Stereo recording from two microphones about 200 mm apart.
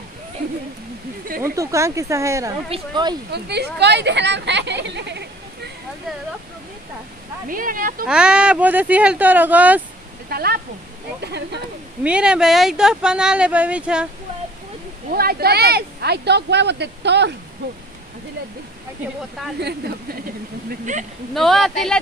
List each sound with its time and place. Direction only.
1.6 s speech: 15° right (ahead or behind)
3.3 s speech: 55° right (ahead or behind)
7.4 s speech: 45° right (ahead or behind)
8.1 s speech: 5° right (ahead or behind)
10.3 s speech: 50° right (ahead or behind)
12.0 s speech: 5° right (ahead or behind)
15.1 s speech: 50° right (ahead or behind)
20.9 s speech: 40° right (ahead or behind)
21.4 s speech: centre (ahead or behind)